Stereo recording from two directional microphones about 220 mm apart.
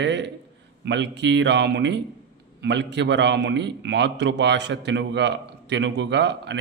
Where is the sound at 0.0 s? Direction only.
50° right (ahead or behind).